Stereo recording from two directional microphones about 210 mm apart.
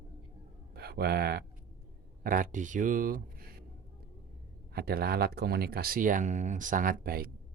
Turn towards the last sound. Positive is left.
turn(degrees=-45)  # may be behind; listen again after turning